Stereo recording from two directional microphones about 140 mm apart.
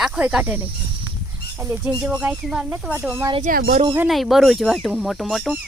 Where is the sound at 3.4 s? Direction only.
90° right.